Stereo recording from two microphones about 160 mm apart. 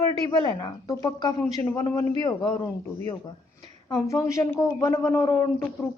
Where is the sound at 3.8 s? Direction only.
20° left (ahead or behind).